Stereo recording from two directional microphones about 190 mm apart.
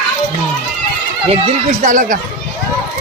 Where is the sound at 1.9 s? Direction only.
45° right (ahead or behind).